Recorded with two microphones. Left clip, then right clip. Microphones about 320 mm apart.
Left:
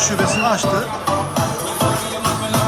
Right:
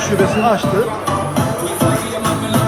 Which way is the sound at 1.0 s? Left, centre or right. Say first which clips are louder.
Right 1 dB; left.